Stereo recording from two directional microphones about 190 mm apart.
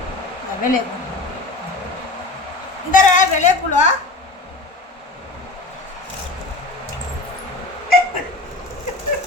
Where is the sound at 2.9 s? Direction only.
40° left (ahead or behind).